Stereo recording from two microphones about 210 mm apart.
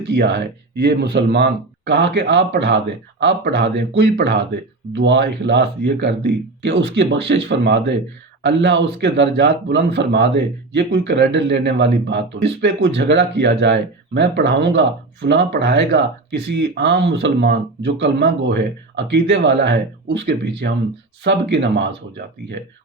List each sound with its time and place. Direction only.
0.0 s speech: 55° right (ahead or behind)